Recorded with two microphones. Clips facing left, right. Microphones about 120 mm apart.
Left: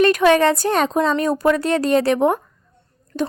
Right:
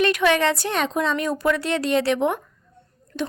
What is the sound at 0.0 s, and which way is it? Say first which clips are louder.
A woman's voice: left 5 dB; 40° left (ahead or behind).